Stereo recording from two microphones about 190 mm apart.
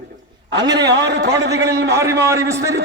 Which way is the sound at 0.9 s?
60° right (ahead or behind).